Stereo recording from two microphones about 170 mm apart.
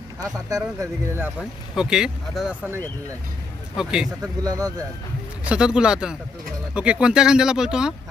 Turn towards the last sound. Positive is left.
turn(degrees=-5)  # may be behind; listen again after turning